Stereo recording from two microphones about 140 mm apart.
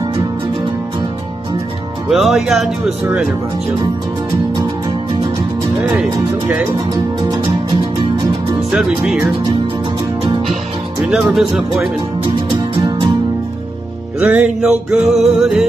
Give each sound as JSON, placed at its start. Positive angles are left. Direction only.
{"t": 2.0, "sound": "speech", "side_deg": 0}
{"t": 8.6, "sound": "speech", "side_deg": -5}
{"t": 10.5, "sound": "music", "side_deg": -5}
{"t": 14.2, "sound": "music", "side_deg": -10}